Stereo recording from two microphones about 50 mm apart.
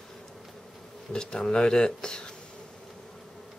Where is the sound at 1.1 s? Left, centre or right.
Centre.